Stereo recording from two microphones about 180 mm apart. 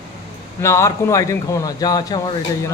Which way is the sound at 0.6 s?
15° left (ahead or behind).